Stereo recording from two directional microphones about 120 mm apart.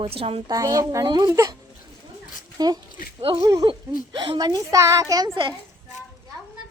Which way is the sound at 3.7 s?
45° right (ahead or behind).